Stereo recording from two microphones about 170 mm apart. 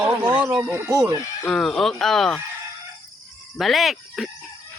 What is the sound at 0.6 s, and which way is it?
Music, 10° right (ahead or behind).